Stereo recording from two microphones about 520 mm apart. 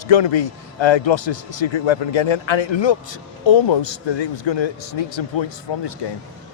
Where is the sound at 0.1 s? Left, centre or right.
Left.